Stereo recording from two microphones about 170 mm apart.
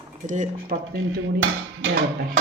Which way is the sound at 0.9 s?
65° right (ahead or behind).